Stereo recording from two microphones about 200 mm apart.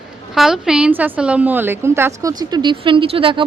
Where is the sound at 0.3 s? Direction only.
Centre (ahead or behind).